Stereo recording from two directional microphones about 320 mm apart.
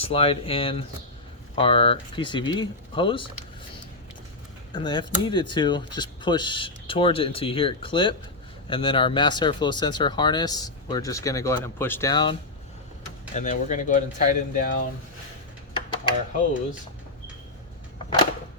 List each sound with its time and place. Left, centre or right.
0.0 s speech: centre
4.7 s speech: centre